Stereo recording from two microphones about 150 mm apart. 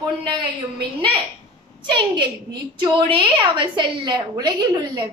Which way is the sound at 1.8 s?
30° right (ahead or behind).